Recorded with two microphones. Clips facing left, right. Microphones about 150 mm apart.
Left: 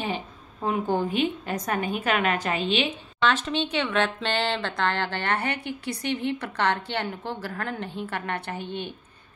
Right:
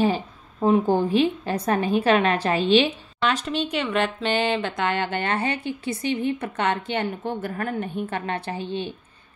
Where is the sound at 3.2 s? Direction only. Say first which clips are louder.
Even; 5° right (ahead or behind).